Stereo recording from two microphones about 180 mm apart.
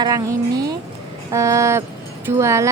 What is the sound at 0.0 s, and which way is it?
Speech, 20° right (ahead or behind).